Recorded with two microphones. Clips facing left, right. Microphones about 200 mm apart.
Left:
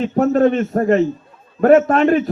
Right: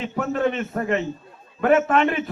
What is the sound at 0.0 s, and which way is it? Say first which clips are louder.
Speech: left 9 dB; 40° left (ahead or behind).